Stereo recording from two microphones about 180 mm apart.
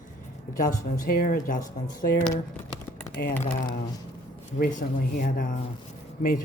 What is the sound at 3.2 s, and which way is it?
Speech, 60° left (ahead or behind).